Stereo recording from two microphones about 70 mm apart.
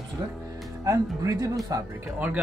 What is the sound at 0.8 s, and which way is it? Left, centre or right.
Speech, right.